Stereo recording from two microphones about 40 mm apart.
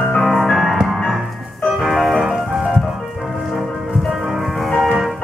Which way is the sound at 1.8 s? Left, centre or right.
Centre.